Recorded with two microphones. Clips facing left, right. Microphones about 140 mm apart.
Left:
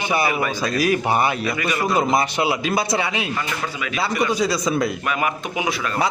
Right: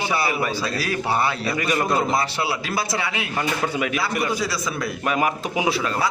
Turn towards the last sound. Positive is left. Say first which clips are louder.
# right 1 dB
turn(degrees=-30)  # may be behind; listen again after turning